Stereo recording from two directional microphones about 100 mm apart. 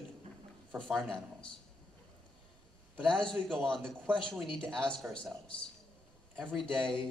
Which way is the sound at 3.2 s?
5° left (ahead or behind).